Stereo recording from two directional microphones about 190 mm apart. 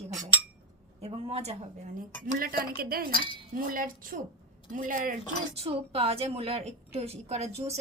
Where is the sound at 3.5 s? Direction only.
45° right (ahead or behind).